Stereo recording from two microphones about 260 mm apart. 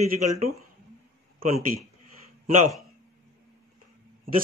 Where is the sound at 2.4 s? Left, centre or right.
Right.